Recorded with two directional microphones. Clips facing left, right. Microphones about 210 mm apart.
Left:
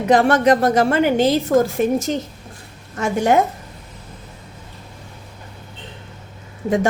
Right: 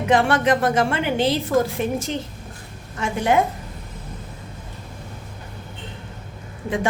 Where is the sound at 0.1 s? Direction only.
40° left (ahead or behind).